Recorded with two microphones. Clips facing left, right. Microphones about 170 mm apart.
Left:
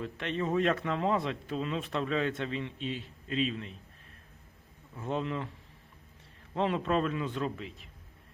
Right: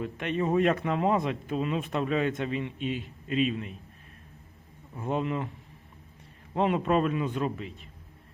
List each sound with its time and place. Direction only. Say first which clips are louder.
0.0 s a man's voice: right 4 dB; 15° right (ahead or behind)
4.9 s a man's voice: right 4 dB; 15° right (ahead or behind)
6.5 s a man's voice: right 4 dB; 15° right (ahead or behind)